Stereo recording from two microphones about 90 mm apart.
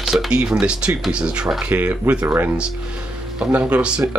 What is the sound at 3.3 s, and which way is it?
Speech, 15° right (ahead or behind).